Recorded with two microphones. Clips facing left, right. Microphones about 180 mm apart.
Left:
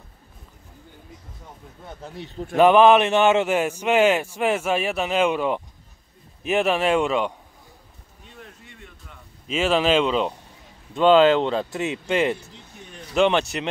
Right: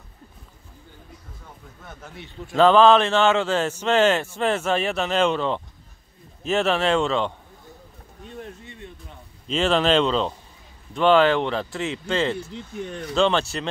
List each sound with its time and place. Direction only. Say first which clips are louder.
1.9 s speech: left 5 dB; 30° left (ahead or behind)
2.5 s speech: left 1 dB; 15° left (ahead or behind)
9.5 s speech: even; 5° left (ahead or behind)